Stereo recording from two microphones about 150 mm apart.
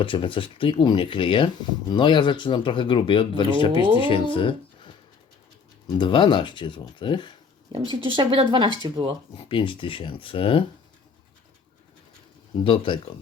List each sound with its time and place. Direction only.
0.0 s speech: 35° left (ahead or behind)
5.9 s speech: 30° left (ahead or behind)
7.7 s speech: 35° right (ahead or behind)
9.3 s speech: 35° left (ahead or behind)
12.6 s speech: 35° left (ahead or behind)